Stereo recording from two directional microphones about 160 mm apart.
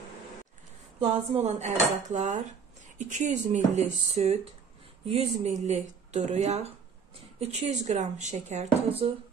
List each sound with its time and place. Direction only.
1.3 s speech: 45° right (ahead or behind)